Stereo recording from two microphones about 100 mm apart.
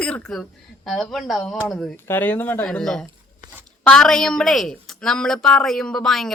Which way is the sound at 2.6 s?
5° left (ahead or behind).